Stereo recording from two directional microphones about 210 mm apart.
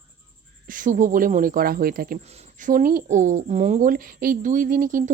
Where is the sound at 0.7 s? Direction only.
40° right (ahead or behind).